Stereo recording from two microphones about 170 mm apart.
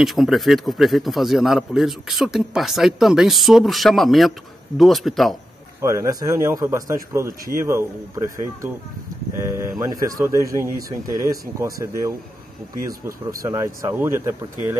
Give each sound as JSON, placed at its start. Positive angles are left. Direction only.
{"t": 0.0, "sound": "a man's voice", "side_deg": 0}
{"t": 5.8, "sound": "a man's voice", "side_deg": -20}
{"t": 13.4, "sound": "speech", "side_deg": -20}